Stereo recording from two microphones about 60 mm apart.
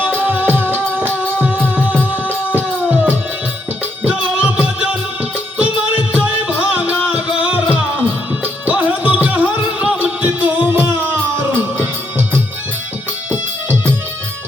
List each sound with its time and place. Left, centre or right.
0.0 s music: right
4.4 s music: right